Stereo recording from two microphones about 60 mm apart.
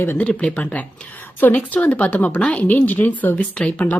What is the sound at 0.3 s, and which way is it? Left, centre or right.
A woman's voice, left.